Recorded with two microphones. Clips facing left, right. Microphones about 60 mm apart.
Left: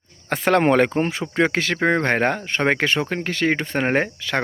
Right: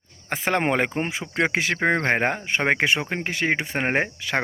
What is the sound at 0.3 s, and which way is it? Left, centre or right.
Speech, centre.